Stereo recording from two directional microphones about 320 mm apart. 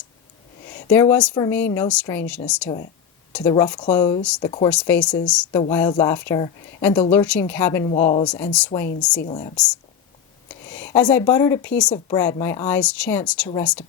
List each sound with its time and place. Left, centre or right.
0.7 s a woman's voice: centre
7.9 s speech: centre
8.2 s a woman's voice: centre
9.2 s speech: centre
10.7 s speech: centre